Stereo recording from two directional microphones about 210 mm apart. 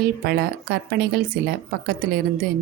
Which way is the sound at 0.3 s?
50° right (ahead or behind).